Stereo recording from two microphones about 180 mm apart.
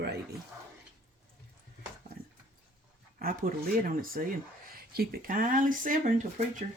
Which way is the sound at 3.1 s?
50° right (ahead or behind).